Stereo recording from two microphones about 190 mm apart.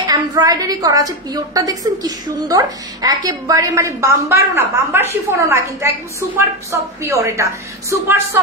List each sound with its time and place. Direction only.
0.0 s a woman's voice: 20° right (ahead or behind)